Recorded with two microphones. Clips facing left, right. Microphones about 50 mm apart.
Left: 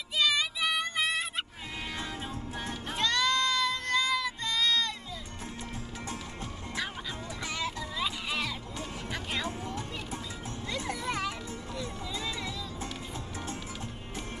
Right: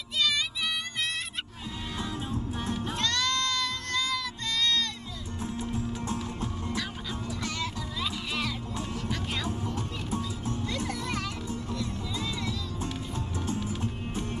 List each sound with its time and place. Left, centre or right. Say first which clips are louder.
0.2 s music: left 1 dB; centre
2.0 s music: right 4 dB; left
3.0 s child singing: left 3 dB; centre
6.0 s music: right 6 dB; left
7.4 s music: left 2 dB; centre
9.7 s music: right 4 dB; left
10.9 s music: even; centre